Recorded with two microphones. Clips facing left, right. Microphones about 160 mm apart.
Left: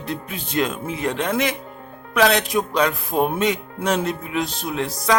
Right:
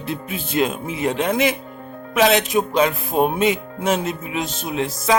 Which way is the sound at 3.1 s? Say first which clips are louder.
Right 2 dB; 15° right (ahead or behind).